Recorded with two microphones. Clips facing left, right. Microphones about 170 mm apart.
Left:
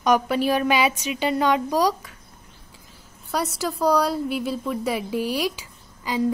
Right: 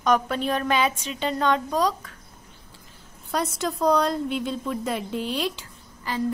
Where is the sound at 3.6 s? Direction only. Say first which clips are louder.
Left 1 dB; 5° left (ahead or behind).